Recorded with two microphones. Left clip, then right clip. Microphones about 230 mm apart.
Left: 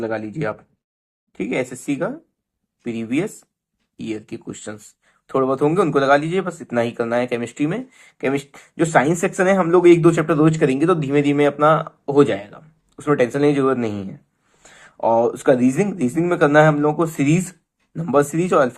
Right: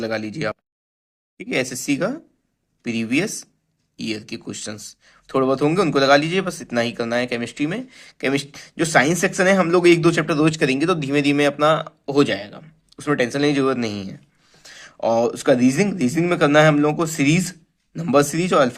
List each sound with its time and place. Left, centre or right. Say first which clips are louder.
0.0 s speech: even; right
17.5 s speech: even; right